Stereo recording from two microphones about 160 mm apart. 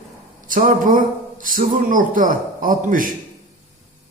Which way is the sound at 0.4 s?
60° right (ahead or behind).